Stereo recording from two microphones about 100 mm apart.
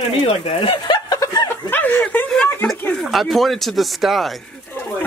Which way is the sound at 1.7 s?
20° left (ahead or behind).